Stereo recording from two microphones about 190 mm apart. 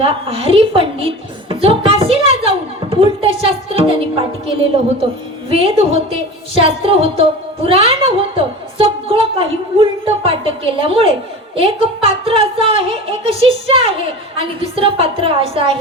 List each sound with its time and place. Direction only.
0.0 s a woman's voice: 30° right (ahead or behind)
2.4 s music: 30° right (ahead or behind)
5.5 s a woman's voice: 30° right (ahead or behind)